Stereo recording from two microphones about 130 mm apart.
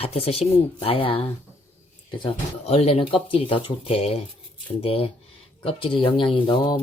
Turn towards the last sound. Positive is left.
turn(degrees=35)  # may be behind; listen again after turning